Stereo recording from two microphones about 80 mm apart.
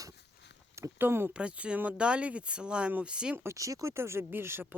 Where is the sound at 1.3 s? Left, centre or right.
Centre.